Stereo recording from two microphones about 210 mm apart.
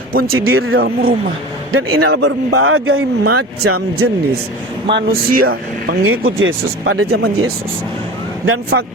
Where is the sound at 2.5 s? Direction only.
80° right.